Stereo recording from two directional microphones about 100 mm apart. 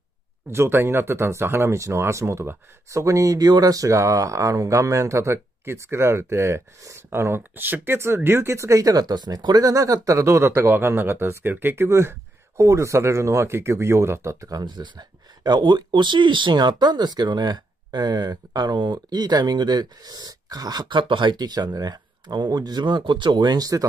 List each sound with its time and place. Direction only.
0.5 s speech: 25° right (ahead or behind)